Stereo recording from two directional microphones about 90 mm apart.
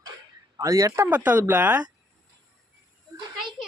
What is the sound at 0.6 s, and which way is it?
Speech, 35° right (ahead or behind).